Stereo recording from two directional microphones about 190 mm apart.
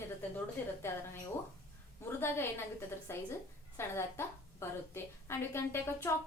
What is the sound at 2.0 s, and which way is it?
A woman's voice, 10° left (ahead or behind).